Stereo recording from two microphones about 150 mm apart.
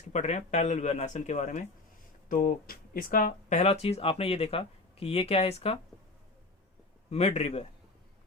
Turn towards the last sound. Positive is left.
turn(degrees=45)  # may be behind; listen again after turning